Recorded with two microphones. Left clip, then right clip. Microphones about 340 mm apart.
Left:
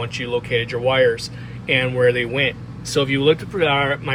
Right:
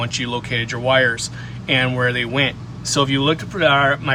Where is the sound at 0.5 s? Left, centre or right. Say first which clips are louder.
Left 2 dB; right.